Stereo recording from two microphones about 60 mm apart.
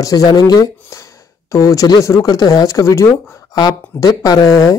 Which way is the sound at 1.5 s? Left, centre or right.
Left.